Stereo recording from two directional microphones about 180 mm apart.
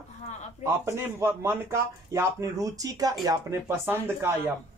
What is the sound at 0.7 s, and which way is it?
A man's voice, 15° right (ahead or behind).